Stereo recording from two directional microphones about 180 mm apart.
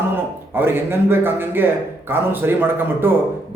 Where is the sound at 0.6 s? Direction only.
10° right (ahead or behind).